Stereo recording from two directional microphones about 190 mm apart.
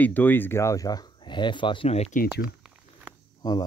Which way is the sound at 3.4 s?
20° left (ahead or behind).